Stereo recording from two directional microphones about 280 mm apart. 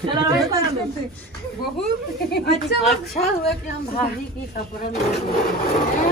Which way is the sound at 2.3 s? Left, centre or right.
Left.